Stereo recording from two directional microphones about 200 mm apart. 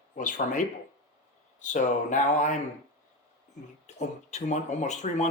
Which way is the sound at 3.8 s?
35° left (ahead or behind).